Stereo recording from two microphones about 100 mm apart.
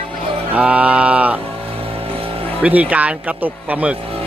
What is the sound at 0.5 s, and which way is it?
Speech, 15° right (ahead or behind).